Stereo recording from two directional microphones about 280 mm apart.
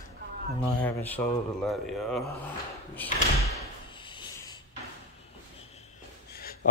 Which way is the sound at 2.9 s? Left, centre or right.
Centre.